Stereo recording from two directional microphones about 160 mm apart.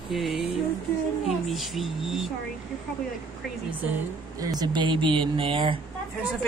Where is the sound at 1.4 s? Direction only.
Centre (ahead or behind).